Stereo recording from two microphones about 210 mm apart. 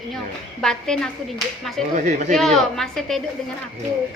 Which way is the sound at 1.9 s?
35° right (ahead or behind).